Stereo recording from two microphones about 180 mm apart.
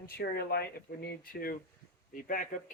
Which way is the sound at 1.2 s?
55° left (ahead or behind).